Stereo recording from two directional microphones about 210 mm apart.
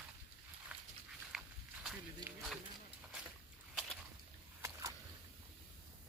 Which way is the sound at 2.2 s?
20° right (ahead or behind).